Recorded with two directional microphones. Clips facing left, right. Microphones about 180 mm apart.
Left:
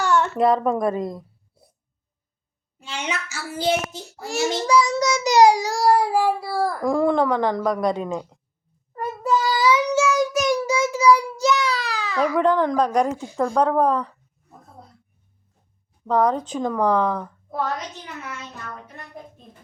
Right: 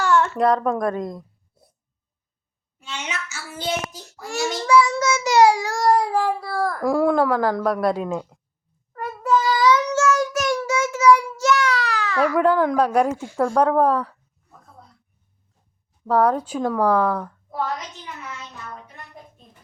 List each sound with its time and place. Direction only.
0.0 s a sound: 20° left (ahead or behind)
0.3 s a woman's voice: centre (ahead or behind)
2.7 s child singing: 30° left (ahead or behind)
4.7 s child singing: 40° left (ahead or behind)
5.7 s speech: 10° left (ahead or behind)
6.8 s a woman's voice: 5° right (ahead or behind)
8.9 s child singing: 10° left (ahead or behind)
10.9 s speech: 15° left (ahead or behind)
11.8 s baby cry: 10° left (ahead or behind)
12.4 s speech: 5° right (ahead or behind)
16.0 s speech: 5° right (ahead or behind)